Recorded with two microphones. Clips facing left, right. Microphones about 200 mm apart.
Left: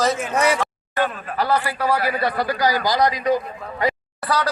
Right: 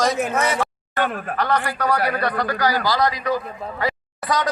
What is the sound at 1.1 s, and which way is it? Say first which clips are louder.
Speech: right 5 dB; 60° right (ahead or behind).